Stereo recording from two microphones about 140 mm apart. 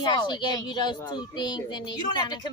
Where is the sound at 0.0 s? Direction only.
35° left (ahead or behind).